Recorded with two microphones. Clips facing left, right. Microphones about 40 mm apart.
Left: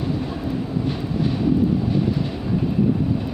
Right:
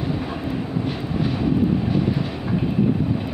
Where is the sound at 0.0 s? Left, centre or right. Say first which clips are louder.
Even; right.